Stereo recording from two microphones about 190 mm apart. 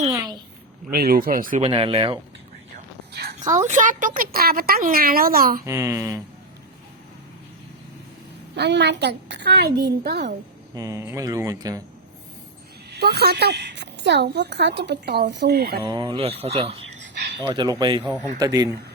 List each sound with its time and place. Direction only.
0.1 s a sound: 20° right (ahead or behind)
0.9 s a woman's voice: 50° right (ahead or behind)
1.6 s speech: 30° right (ahead or behind)
3.1 s a sound: 60° right (ahead or behind)
3.4 s a woman's voice: 40° right (ahead or behind)
5.6 s speech: 15° right (ahead or behind)
8.5 s a woman's voice: 65° right (ahead or behind)
10.8 s speech: 15° right (ahead or behind)
12.9 s a woman's voice: 60° right (ahead or behind)
15.8 s speech: 20° right (ahead or behind)